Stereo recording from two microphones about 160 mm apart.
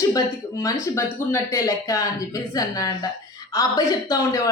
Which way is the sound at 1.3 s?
15° left (ahead or behind).